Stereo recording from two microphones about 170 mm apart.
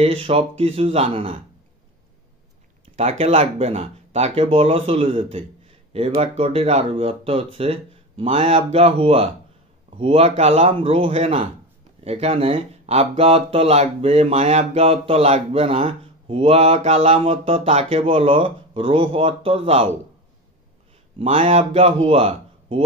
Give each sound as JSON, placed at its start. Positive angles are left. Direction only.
{"t": 0.0, "sound": "speech", "side_deg": -35}
{"t": 3.0, "sound": "speech", "side_deg": -40}
{"t": 21.2, "sound": "speech", "side_deg": -35}